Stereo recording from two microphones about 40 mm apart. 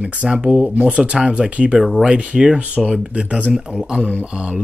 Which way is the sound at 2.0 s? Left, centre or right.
Right.